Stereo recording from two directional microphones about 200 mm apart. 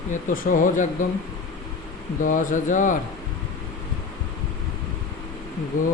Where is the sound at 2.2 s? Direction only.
40° left (ahead or behind).